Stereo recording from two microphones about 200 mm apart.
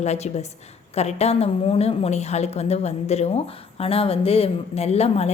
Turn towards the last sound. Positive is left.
turn(degrees=30)  # may be behind; listen again after turning